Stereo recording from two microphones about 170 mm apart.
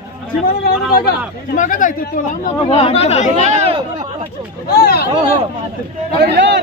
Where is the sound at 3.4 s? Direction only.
40° right (ahead or behind).